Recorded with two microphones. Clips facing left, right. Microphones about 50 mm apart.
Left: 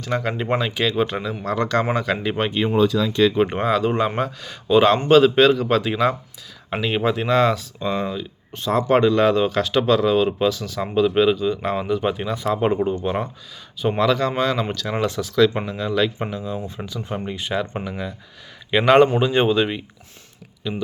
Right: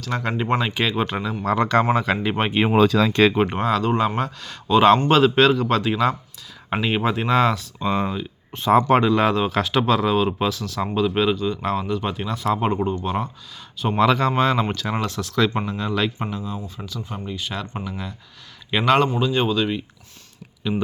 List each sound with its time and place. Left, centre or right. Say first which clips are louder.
0.1 s speech: even; centre
1.5 s speech: right 2 dB; centre
2.7 s speech: right 2 dB; right
3.5 s speech: left 1 dB; centre
6.7 s speech: left 1 dB; centre
14.0 s speech: right 2 dB; centre
16.3 s speech: left 2 dB; centre
16.6 s speech: left 3 dB; left
17.5 s speech: left 5 dB; centre
19.2 s speech: left 3 dB; left
20.7 s speech: right 3 dB; centre